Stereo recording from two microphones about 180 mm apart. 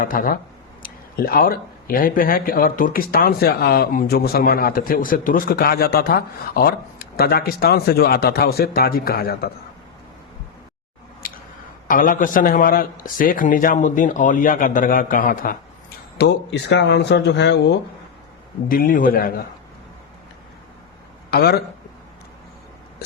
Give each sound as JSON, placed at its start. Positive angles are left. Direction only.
{"t": 0.0, "sound": "a man's voice", "side_deg": 50}
{"t": 11.2, "sound": "a sound", "side_deg": 55}
{"t": 11.9, "sound": "a man's voice", "side_deg": 50}
{"t": 16.1, "sound": "speech", "side_deg": 70}
{"t": 18.7, "sound": "a man's voice", "side_deg": 50}
{"t": 21.2, "sound": "speech", "side_deg": 60}